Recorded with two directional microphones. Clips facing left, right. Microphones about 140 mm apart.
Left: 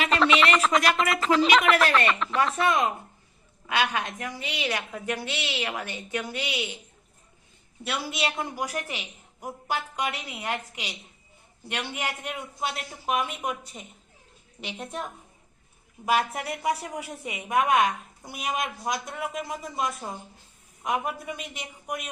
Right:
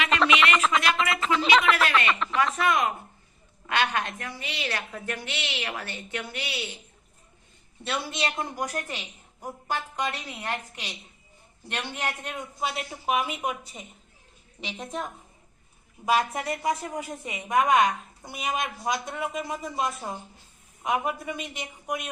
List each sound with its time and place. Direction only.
0.1 s a sound: centre (ahead or behind)
1.4 s a woman's voice: centre (ahead or behind)
2.6 s speech: 25° left (ahead or behind)
3.7 s a woman's voice: 10° left (ahead or behind)
7.9 s a woman's voice: centre (ahead or behind)
12.5 s a woman's voice: centre (ahead or behind)